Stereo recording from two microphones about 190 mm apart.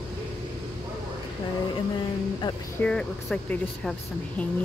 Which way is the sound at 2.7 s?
5° left (ahead or behind).